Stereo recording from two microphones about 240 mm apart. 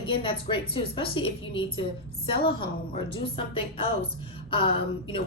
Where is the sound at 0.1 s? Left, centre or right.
Left.